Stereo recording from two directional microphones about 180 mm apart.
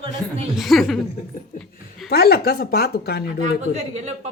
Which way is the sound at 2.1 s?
60° left (ahead or behind).